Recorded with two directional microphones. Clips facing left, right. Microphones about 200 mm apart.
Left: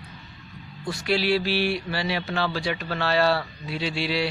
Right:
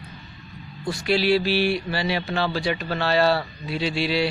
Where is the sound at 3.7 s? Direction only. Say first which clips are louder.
Right 3 dB; centre (ahead or behind).